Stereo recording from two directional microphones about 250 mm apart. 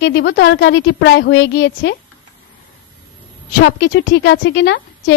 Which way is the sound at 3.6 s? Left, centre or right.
Left.